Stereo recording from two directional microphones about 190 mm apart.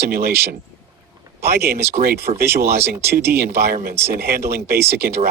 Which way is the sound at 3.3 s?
55° right (ahead or behind).